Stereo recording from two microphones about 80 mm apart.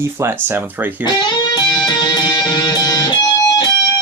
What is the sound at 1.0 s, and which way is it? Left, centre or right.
Music, left.